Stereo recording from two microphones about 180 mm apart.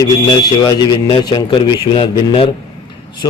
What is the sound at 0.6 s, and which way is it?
A man's voice, 20° left (ahead or behind).